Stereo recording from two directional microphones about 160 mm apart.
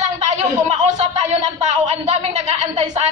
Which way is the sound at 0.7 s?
45° right (ahead or behind).